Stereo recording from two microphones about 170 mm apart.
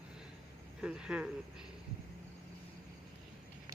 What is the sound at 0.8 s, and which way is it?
Speech, 5° right (ahead or behind).